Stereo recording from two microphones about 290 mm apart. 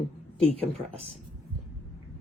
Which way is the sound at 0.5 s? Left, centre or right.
Right.